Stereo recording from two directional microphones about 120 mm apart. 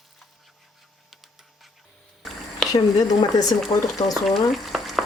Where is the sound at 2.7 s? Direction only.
30° left (ahead or behind).